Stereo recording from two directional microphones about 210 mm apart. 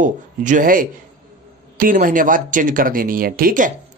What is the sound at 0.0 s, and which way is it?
Speech, 40° right (ahead or behind).